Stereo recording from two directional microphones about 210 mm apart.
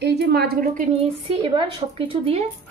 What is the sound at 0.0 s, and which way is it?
Speech, 50° right (ahead or behind).